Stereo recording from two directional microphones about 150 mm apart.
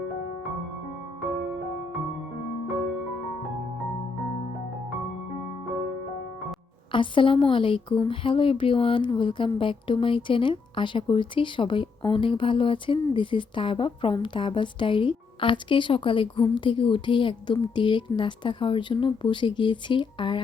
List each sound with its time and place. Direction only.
1.3 s music: centre (ahead or behind)
6.9 s speech: 35° left (ahead or behind)